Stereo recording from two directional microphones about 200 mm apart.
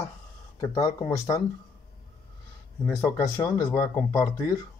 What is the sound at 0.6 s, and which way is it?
Speech, 20° left (ahead or behind).